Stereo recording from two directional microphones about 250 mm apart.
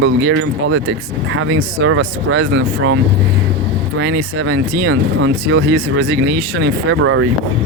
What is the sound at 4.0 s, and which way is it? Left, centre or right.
Speech, right.